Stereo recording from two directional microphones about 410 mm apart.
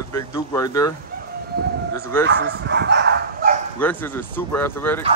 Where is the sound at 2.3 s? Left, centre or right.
Right.